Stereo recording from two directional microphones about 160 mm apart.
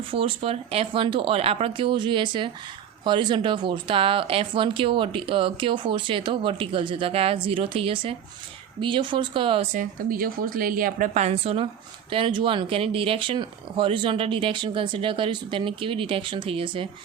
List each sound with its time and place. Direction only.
0.1 s speech: 35° right (ahead or behind)
9.7 s a woman's voice: 60° right (ahead or behind); by 16.9 s 35° right (ahead or behind)